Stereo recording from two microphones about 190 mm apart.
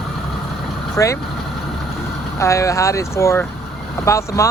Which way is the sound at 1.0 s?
15° left (ahead or behind).